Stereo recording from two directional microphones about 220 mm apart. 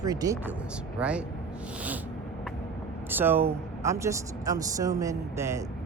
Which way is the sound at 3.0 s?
10° right (ahead or behind).